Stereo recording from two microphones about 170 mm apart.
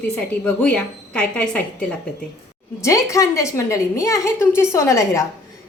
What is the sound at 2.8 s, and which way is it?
A woman's voice, 20° left (ahead or behind).